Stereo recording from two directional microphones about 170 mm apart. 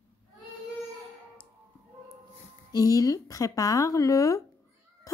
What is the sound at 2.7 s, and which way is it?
Speech, 20° left (ahead or behind).